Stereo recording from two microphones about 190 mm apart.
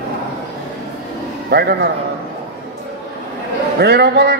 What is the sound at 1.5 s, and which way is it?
Speech, 55° right (ahead or behind).